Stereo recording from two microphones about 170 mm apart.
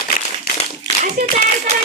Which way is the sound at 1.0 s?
40° right (ahead or behind).